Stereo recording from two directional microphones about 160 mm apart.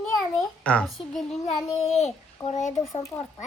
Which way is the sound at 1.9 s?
45° left (ahead or behind).